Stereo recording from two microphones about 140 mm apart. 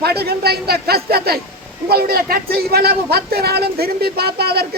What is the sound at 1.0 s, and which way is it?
Speech, 90° right.